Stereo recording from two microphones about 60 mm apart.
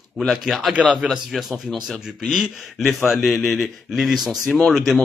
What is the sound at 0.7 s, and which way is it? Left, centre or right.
Speech, right.